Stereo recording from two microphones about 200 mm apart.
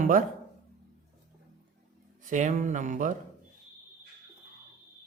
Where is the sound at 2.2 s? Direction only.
40° right (ahead or behind).